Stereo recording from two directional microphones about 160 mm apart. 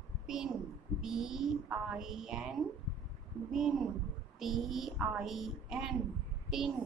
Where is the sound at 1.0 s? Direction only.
5° right (ahead or behind).